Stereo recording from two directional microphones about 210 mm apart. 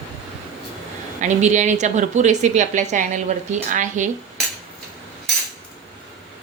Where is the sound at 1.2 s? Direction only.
35° right (ahead or behind).